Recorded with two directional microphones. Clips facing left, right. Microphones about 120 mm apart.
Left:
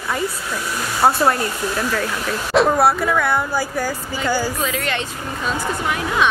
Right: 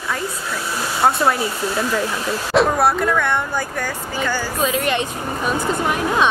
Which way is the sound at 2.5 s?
Centre (ahead or behind).